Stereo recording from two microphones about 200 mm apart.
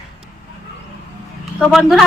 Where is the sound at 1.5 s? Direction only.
5° left (ahead or behind).